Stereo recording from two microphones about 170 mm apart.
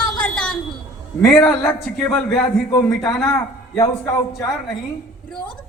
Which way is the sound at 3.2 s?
15° left (ahead or behind).